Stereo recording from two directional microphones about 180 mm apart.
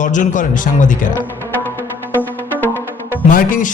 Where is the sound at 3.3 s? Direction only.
50° left (ahead or behind).